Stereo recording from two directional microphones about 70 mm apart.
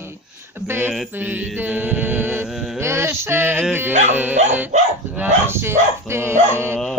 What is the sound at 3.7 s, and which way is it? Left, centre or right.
Speech, right.